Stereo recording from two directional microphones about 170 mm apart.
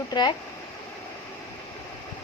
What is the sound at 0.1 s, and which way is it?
Speech, 25° left (ahead or behind).